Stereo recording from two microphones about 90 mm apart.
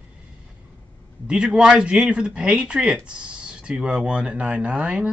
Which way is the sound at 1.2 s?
10° right (ahead or behind).